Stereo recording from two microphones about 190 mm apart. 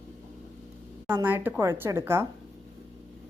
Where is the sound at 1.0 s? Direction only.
10° right (ahead or behind).